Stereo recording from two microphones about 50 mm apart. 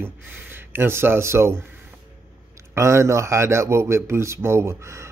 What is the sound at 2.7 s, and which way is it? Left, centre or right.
A man's voice, right.